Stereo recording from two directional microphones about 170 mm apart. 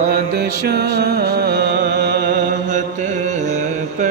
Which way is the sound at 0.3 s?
70° right (ahead or behind).